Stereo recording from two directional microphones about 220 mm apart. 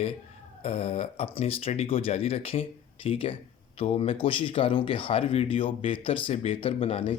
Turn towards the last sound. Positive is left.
turn(degrees=25)  # may be behind; listen again after turning